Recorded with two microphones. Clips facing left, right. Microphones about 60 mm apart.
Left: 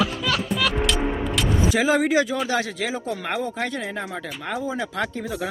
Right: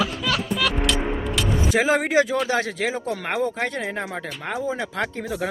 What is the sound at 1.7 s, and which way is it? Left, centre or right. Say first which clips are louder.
Speech: right 1 dB; right.